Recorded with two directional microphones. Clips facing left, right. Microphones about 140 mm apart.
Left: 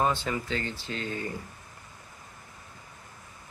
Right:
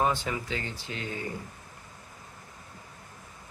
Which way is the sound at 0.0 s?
15° right (ahead or behind).